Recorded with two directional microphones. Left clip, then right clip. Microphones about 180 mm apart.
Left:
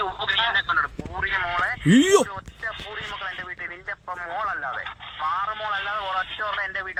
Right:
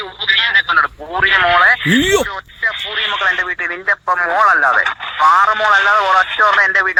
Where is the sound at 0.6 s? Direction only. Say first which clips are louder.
Right 10 dB; 40° right (ahead or behind).